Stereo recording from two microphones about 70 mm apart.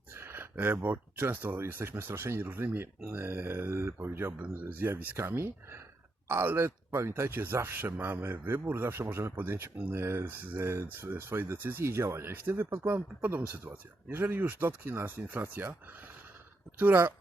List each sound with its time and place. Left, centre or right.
0.1 s a sound: right
1.5 s speech: right
4.4 s speech: right
5.3 s speech: right
10.7 s speech: right
11.9 s speech: right
16.7 s speech: right